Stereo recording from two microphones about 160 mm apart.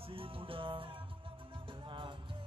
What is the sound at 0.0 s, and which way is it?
Music, 35° right (ahead or behind).